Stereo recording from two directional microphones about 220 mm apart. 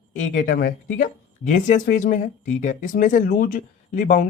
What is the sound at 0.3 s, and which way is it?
Speech, 45° left (ahead or behind).